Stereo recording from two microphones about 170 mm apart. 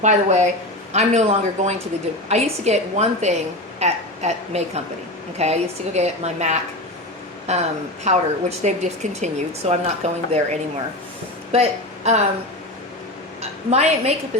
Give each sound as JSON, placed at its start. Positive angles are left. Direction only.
{"t": 0.0, "sound": "speech", "side_deg": -45}
{"t": 8.0, "sound": "speech", "side_deg": -40}
{"t": 13.4, "sound": "a woman's voice", "side_deg": -40}